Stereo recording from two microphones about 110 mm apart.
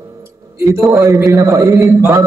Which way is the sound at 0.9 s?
35° right (ahead or behind).